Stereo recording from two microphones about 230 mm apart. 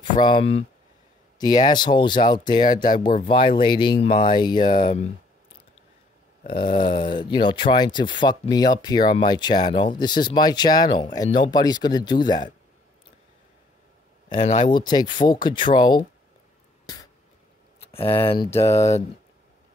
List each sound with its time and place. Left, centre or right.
0.2 s speech: left
2.7 s speech: left
3.5 s speech: left
6.6 s speech: left
14.3 s speech: left
16.8 s a sound: centre
17.7 s speech: left
18.5 s speech: centre